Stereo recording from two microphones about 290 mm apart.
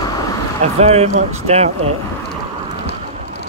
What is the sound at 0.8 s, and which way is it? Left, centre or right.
Speech, right.